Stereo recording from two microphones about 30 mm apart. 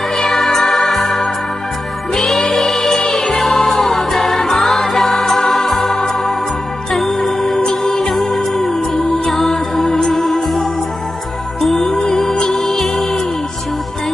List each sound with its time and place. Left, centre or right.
0.2 s music: centre
10.1 s music: centre
11.9 s music: centre